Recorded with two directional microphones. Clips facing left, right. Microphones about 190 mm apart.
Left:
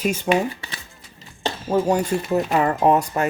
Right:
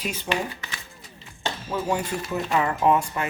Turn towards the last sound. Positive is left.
turn(degrees=40)  # may be behind; listen again after turning